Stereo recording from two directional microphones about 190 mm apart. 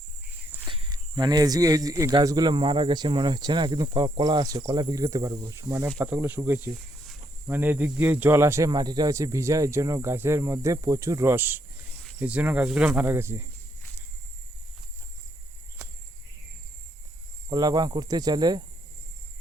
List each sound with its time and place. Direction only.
0.7 s speech: 25° right (ahead or behind)
17.5 s speech: 20° right (ahead or behind)